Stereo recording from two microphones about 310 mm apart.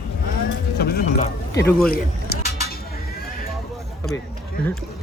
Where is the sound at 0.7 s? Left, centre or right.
Left.